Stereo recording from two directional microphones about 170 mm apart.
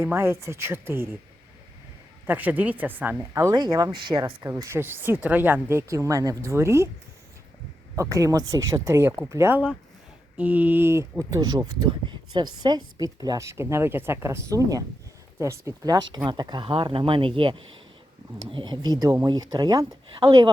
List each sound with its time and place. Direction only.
0.0 s speech: 15° right (ahead or behind)
2.2 s speech: 10° right (ahead or behind)
8.1 s speech: 20° right (ahead or behind)